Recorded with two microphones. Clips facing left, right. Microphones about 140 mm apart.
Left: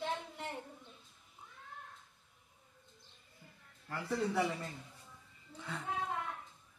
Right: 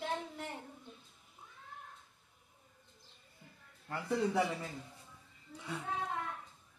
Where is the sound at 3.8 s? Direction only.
20° right (ahead or behind).